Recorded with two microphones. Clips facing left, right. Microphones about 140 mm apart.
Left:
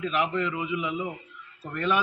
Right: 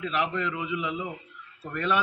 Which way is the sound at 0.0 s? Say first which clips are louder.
Left 2 dB; 15° left (ahead or behind).